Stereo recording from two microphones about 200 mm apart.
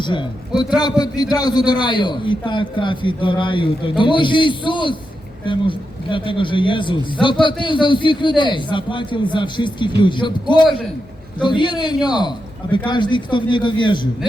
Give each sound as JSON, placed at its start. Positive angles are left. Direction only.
{"t": 0.0, "sound": "a man's voice", "side_deg": 25}
{"t": 11.4, "sound": "a man's voice", "side_deg": 25}